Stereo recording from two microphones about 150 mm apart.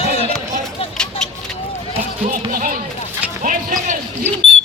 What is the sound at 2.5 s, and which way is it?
Speech, 65° right (ahead or behind).